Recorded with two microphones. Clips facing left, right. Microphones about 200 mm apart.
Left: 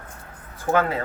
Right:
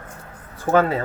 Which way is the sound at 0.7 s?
35° right (ahead or behind).